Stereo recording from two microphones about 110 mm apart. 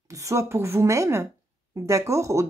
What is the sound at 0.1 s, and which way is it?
Speech, 30° right (ahead or behind).